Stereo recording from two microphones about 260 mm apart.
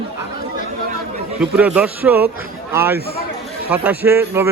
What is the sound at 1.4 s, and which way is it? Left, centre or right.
A man's voice, centre.